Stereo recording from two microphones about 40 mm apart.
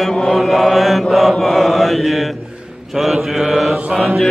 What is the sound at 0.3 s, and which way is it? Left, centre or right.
Mantra, centre.